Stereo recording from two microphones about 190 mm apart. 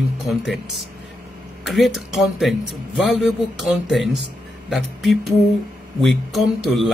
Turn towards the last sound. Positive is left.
turn(degrees=0)  # may be behind; listen again after turning